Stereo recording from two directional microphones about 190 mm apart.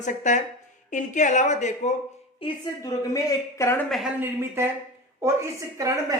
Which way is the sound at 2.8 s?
15° left (ahead or behind).